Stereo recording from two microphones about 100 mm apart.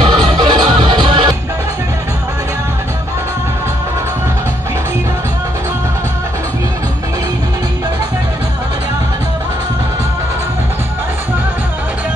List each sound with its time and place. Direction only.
0.0 s music: 55° right (ahead or behind)